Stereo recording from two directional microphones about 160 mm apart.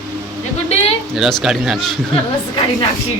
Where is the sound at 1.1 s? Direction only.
Centre (ahead or behind).